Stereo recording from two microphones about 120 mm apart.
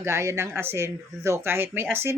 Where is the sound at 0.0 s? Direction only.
25° right (ahead or behind).